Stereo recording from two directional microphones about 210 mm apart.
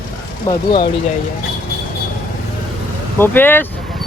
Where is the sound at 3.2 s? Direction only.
10° left (ahead or behind).